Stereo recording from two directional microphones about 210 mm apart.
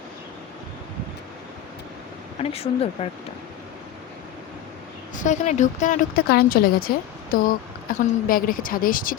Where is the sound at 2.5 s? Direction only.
30° left (ahead or behind).